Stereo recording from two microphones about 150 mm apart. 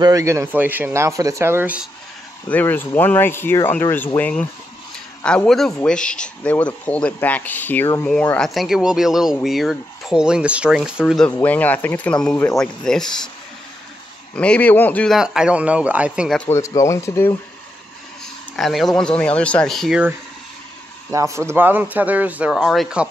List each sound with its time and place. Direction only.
0.0 s speech: 20° right (ahead or behind)
2.4 s speech: 10° left (ahead or behind)
11.2 s speech: 10° left (ahead or behind)
14.3 s speech: 10° left (ahead or behind)
15.1 s speech: 5° right (ahead or behind)
16.4 s speech: 20° left (ahead or behind)
18.2 s speech: centre (ahead or behind)
21.1 s speech: 20° right (ahead or behind)
22.5 s speech: centre (ahead or behind)